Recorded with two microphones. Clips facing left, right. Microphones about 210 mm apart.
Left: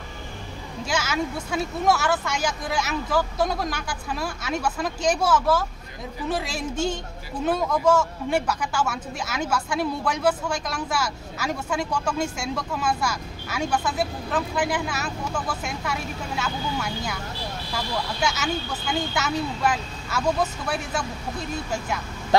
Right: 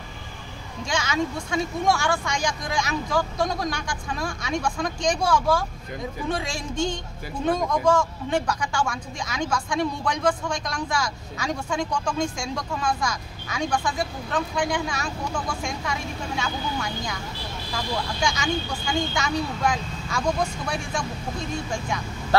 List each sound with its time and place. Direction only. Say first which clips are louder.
0.8 s speech: right 1 dB; 5° left (ahead or behind)
22.3 s vehicle: even; 15° left (ahead or behind)